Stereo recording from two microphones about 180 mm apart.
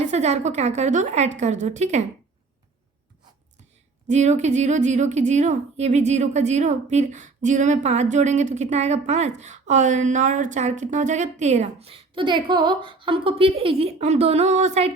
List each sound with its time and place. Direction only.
0.0 s a woman's voice: 40° right (ahead or behind)
4.0 s a woman's voice: 40° right (ahead or behind)